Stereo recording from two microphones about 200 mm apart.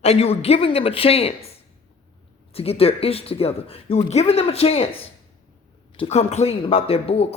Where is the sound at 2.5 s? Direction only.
30° left (ahead or behind).